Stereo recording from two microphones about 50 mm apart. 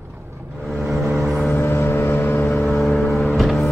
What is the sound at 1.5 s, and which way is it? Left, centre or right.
Vehicle, left.